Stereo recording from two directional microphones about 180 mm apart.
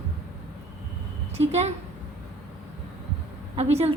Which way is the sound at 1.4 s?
35° right (ahead or behind).